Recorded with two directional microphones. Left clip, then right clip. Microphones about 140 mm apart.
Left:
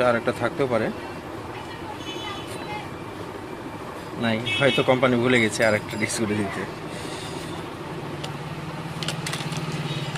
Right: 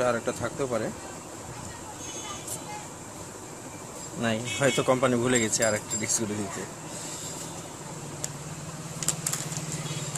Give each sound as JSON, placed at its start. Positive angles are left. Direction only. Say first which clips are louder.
{"t": 0.0, "sound": "speech", "louder": "left 6 dB", "side_deg": -15}
{"t": 4.2, "sound": "speech", "louder": "left 5 dB", "side_deg": -20}